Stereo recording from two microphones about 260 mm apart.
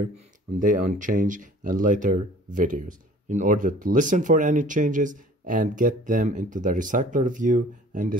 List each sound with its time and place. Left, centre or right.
0.6 s speech: right